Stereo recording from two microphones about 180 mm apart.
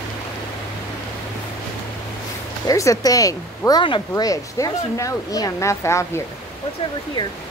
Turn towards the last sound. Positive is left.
turn(degrees=25)  # may be behind; listen again after turning